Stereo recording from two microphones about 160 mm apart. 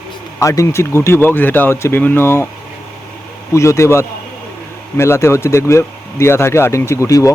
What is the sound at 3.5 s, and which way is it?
Speech, 20° left (ahead or behind).